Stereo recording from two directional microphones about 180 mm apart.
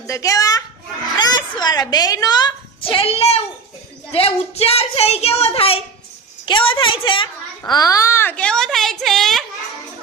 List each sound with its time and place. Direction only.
0.1 s a woman's voice: 20° left (ahead or behind); by 9.4 s centre (ahead or behind)